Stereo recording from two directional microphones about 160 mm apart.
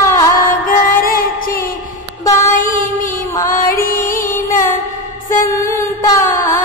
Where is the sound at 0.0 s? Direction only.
20° left (ahead or behind).